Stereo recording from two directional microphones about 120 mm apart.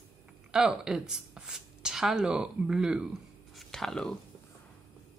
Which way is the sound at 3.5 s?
5° left (ahead or behind).